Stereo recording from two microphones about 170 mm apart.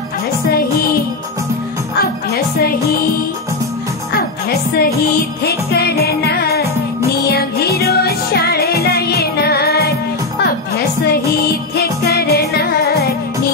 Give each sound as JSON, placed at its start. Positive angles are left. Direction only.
{"t": 2.0, "sound": "music", "side_deg": 65}
{"t": 5.4, "sound": "music", "side_deg": 70}
{"t": 11.7, "sound": "music", "side_deg": 70}